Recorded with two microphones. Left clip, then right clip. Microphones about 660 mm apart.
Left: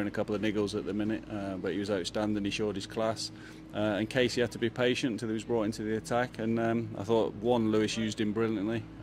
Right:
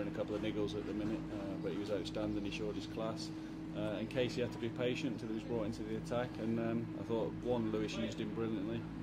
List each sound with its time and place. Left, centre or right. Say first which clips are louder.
0.2 s speech: left 8 dB; left